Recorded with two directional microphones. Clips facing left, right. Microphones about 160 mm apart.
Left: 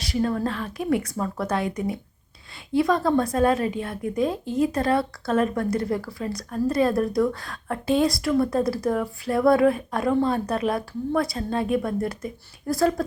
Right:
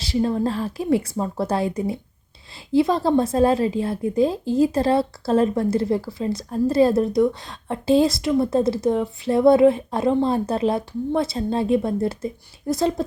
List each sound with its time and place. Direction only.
0.0 s a woman's voice: 25° right (ahead or behind)